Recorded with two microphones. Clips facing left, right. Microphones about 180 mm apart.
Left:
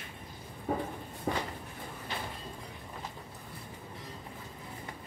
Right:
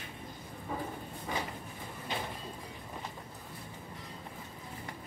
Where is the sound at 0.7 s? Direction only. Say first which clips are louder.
Left 6 dB; 50° left (ahead or behind).